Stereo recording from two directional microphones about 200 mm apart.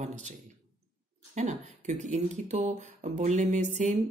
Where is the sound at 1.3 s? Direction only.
35° right (ahead or behind).